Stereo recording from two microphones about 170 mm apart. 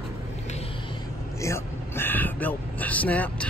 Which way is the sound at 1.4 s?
15° left (ahead or behind).